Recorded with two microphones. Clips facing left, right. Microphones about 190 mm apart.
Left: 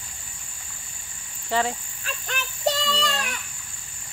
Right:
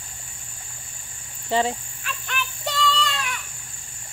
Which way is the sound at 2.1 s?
40° left (ahead or behind).